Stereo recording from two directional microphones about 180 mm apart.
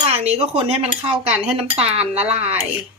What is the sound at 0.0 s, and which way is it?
A woman's voice, 35° right (ahead or behind).